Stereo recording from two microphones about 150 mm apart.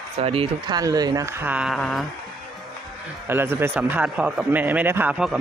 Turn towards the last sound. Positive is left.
turn(degrees=-5)  # may be behind; listen again after turning